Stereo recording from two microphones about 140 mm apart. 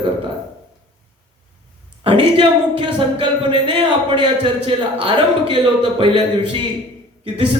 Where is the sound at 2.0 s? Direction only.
40° right (ahead or behind).